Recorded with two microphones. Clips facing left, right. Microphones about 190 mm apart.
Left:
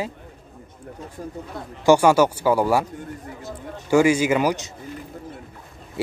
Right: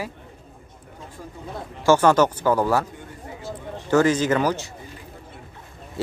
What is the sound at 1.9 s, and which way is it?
Speech, 10° left (ahead or behind).